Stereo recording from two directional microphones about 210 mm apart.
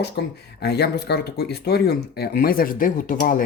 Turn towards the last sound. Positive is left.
turn(degrees=40)  # may be behind; listen again after turning